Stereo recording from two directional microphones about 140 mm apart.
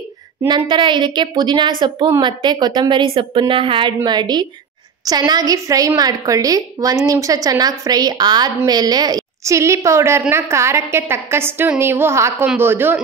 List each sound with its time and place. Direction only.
0.5 s a woman's voice: 35° right (ahead or behind); by 13.0 s 15° right (ahead or behind)